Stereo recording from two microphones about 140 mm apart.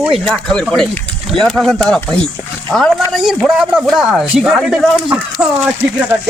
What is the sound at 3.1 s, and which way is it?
Speech, 5° right (ahead or behind).